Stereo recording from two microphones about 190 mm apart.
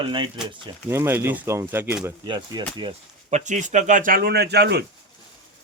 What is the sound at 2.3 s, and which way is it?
Speech, 25° right (ahead or behind).